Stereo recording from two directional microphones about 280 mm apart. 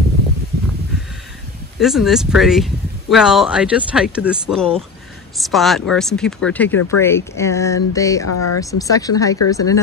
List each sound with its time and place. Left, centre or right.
1.8 s speech: centre
6.7 s speech: left
7.0 s speech: centre
8.2 s speech: left
8.5 s speech: centre